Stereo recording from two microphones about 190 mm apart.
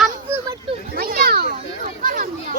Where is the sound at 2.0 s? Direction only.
50° right (ahead or behind).